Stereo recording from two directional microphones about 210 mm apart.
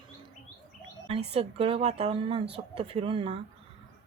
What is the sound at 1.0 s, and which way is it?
A woman's voice, 25° right (ahead or behind).